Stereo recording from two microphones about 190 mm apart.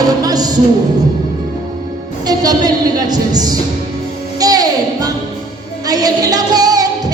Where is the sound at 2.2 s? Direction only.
20° right (ahead or behind).